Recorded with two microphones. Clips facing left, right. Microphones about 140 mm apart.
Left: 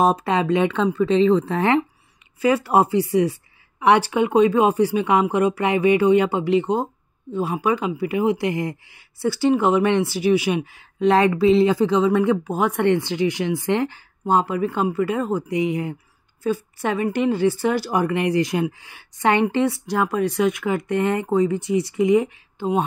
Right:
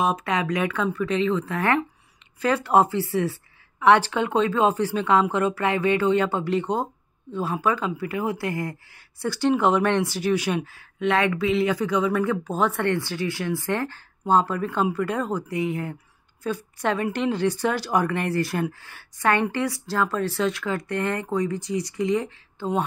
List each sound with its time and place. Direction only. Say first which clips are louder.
0.0 s speech: left 5 dB; 30° left (ahead or behind)
2.4 s speech: left 2 dB; 10° left (ahead or behind)
11.0 s speech: left 6 dB; 35° left (ahead or behind); by 15.4 s 5° left (ahead or behind)
15.4 s speech: left 4 dB; 20° left (ahead or behind)